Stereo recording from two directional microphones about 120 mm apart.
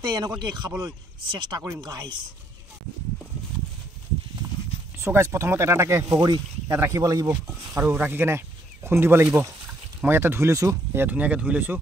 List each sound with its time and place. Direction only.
0.0 s speech: 35° right (ahead or behind)
4.9 s speech: 20° right (ahead or behind)